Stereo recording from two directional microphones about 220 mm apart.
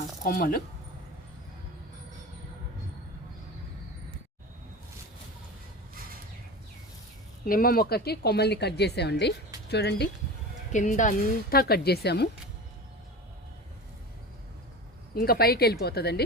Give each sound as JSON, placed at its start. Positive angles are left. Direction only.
{"t": 0.3, "sound": "speech", "side_deg": 40}
{"t": 7.4, "sound": "speech", "side_deg": 40}
{"t": 10.7, "sound": "speech", "side_deg": 35}
{"t": 15.1, "sound": "speech", "side_deg": 45}